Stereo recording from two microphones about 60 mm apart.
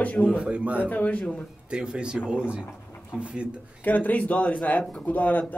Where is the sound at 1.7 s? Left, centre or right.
Centre.